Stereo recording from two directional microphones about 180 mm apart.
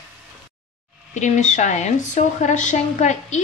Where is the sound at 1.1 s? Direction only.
40° left (ahead or behind).